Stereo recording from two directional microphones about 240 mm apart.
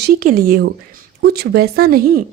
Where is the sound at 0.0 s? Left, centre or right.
Right.